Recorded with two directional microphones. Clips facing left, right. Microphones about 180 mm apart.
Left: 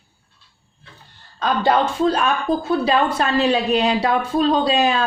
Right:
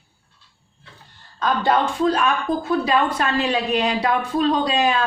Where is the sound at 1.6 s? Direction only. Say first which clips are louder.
Left 2 dB; 30° left (ahead or behind).